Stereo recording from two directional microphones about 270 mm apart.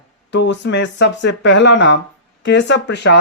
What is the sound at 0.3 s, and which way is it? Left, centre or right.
Speech, left.